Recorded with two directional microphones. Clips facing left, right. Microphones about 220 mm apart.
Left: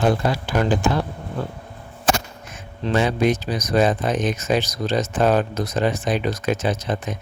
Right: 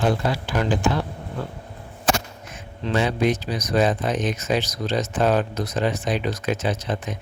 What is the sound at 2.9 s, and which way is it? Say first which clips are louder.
Speech: left 2 dB; 50° left (ahead or behind).